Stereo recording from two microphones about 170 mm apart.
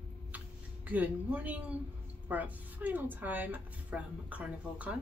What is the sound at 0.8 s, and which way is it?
A woman's voice, 10° right (ahead or behind).